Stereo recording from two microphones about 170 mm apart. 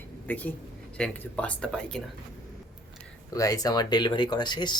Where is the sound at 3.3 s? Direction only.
20° left (ahead or behind).